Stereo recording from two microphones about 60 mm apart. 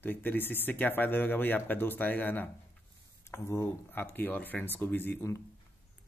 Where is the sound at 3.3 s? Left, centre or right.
Left.